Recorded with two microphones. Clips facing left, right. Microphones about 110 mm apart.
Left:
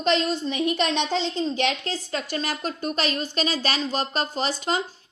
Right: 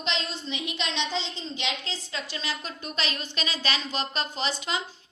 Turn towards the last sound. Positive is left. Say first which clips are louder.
# left 5 dB
turn(degrees=40)  # may be behind; listen again after turning